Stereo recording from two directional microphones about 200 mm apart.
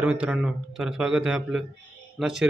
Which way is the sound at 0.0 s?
5° right (ahead or behind).